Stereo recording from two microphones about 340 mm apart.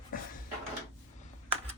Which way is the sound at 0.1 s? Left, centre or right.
Left.